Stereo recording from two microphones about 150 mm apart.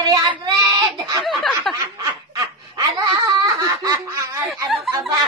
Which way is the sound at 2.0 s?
30° right (ahead or behind).